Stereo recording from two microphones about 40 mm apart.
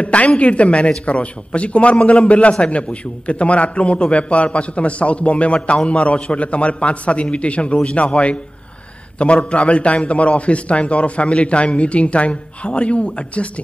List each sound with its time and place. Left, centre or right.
0.0 s a man's voice: left